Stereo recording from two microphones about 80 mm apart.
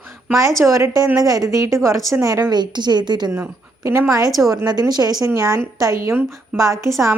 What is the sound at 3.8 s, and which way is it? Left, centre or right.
Speech, right.